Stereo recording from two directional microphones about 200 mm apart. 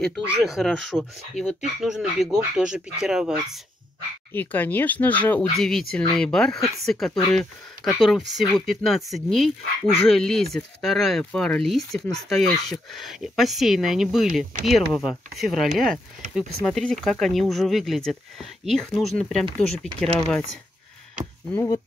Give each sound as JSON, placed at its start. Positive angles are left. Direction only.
{"t": 0.0, "sound": "speech", "side_deg": 0}
{"t": 4.3, "sound": "speech", "side_deg": 10}
{"t": 21.5, "sound": "speech", "side_deg": 15}